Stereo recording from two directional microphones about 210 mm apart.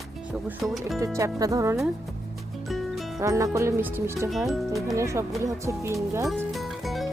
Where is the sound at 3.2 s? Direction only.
15° right (ahead or behind).